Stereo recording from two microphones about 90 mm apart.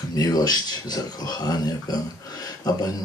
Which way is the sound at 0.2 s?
45° left (ahead or behind).